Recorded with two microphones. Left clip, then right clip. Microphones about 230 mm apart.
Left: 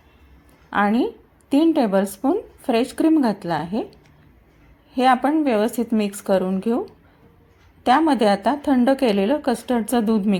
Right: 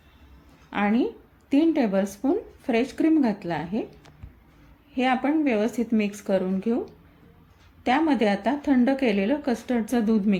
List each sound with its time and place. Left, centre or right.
0.7 s a woman's voice: centre
4.9 s speech: centre
7.9 s speech: centre